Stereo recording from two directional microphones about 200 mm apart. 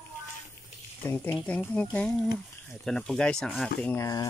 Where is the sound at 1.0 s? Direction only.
10° left (ahead or behind).